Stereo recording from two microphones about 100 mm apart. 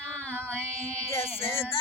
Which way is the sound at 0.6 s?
90° left.